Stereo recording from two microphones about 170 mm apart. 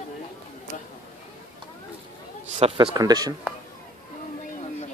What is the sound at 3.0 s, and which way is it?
Speech, 20° right (ahead or behind).